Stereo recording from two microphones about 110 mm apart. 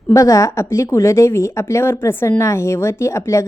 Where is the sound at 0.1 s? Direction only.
30° left (ahead or behind).